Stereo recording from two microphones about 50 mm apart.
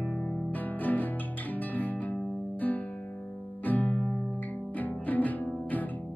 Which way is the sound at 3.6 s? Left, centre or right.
Left.